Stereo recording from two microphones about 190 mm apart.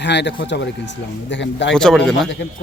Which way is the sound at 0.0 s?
65° left (ahead or behind).